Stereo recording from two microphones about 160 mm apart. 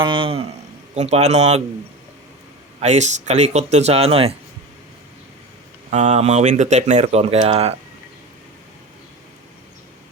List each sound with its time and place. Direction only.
0.0 s speech: 30° right (ahead or behind)
2.8 s speech: 45° right (ahead or behind)
5.9 s speech: 45° right (ahead or behind)